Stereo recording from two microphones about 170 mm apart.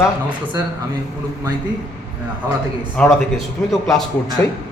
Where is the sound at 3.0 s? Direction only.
5° left (ahead or behind).